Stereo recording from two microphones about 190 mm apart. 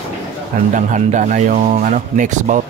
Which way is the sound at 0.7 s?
40° right (ahead or behind).